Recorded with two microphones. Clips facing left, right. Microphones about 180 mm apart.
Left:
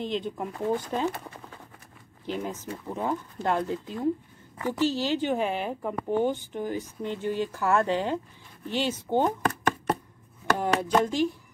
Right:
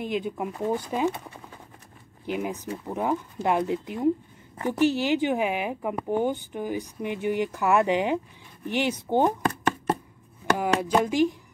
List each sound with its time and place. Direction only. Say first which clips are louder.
0.0 s speech: right 2 dB; 10° right (ahead or behind)
10.6 s speech: even; 10° right (ahead or behind)